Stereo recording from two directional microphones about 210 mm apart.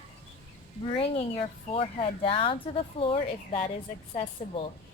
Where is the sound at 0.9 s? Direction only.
25° left (ahead or behind).